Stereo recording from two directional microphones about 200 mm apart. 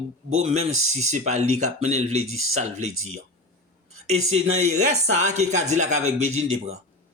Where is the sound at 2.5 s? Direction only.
35° right (ahead or behind).